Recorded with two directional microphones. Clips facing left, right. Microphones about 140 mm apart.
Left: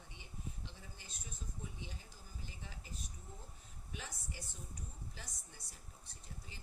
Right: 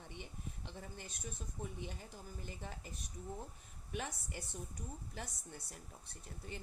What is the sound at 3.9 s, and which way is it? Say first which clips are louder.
A woman's voice: right 7 dB; 55° right (ahead or behind).